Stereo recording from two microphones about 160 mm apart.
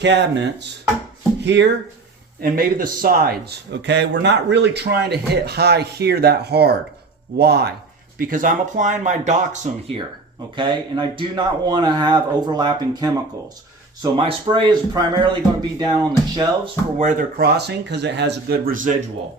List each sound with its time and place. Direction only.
0.0 s speech: 90° right
1.5 s speech: 90° right
2.4 s speech: 65° right (ahead or behind); by 7.7 s 90° right
8.2 s speech: 55° right (ahead or behind)
10.5 s speech: 30° right (ahead or behind)
17.0 s speech: 50° right (ahead or behind)
17.3 s speech: 85° right; by 19.0 s 55° right (ahead or behind)